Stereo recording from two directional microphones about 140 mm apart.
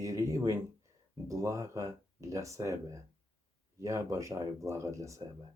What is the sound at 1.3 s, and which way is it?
Speech, 25° right (ahead or behind).